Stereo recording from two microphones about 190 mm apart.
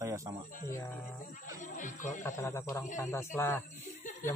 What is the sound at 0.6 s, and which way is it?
Speech, 20° left (ahead or behind).